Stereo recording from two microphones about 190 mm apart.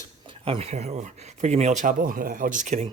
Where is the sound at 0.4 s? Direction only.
30° right (ahead or behind).